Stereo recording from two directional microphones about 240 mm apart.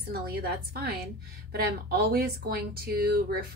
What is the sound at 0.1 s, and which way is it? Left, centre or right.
Speech, right.